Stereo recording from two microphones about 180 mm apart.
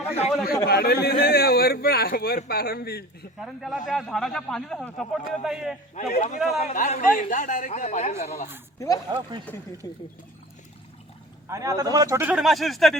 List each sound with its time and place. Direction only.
0.4 s a man's voice: 60° left (ahead or behind)
3.4 s speech: centre (ahead or behind)
5.9 s a man's voice: 40° left (ahead or behind)
9.1 s speech: 25° right (ahead or behind)
9.5 s speech: 10° left (ahead or behind)
9.8 s speech: 20° left (ahead or behind)
11.4 s a man's voice: 15° right (ahead or behind); by 13.0 s centre (ahead or behind)